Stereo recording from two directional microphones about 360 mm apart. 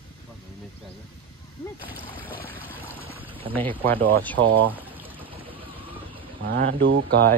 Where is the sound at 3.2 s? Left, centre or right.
Centre.